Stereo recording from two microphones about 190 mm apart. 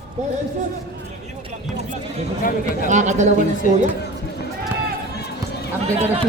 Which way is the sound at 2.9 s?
40° right (ahead or behind).